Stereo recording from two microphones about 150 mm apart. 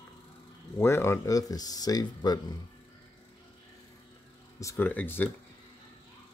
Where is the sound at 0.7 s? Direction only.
15° left (ahead or behind).